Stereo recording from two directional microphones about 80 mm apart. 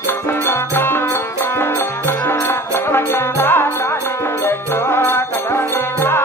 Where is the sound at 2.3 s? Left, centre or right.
Left.